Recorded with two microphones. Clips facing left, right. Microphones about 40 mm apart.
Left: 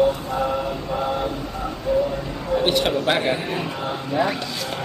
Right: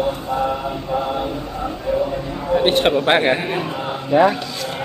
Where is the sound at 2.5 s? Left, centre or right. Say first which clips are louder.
Right 4 dB; right.